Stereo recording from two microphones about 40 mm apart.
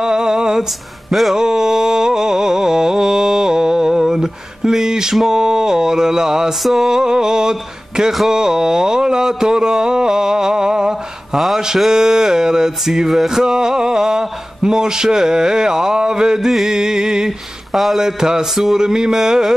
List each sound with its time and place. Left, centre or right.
0.0 s a sound: centre
5.3 s speech: centre
6.6 s mantra: centre
6.9 s speech: centre
11.3 s mantra: centre
11.9 s speech: centre
16.4 s speech: centre
17.7 s mantra: centre
18.0 s speech: centre